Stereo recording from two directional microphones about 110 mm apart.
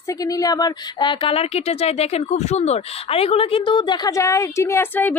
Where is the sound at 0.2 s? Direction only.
35° left (ahead or behind).